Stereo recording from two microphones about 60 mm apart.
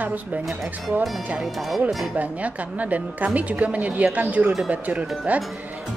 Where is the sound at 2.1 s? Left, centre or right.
Right.